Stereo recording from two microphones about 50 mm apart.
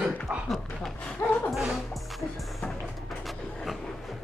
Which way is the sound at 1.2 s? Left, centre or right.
Left.